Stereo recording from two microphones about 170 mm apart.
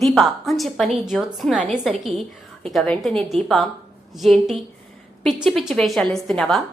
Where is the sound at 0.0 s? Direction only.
Centre (ahead or behind).